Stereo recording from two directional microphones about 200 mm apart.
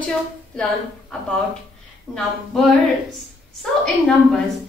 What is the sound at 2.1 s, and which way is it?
Speech, centre (ahead or behind).